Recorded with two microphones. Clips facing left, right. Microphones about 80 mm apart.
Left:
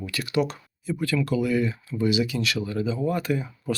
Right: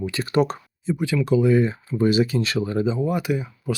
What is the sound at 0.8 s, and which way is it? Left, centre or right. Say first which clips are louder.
Speech: right 2 dB; right.